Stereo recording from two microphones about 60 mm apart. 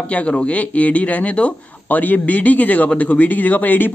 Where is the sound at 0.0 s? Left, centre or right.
Left.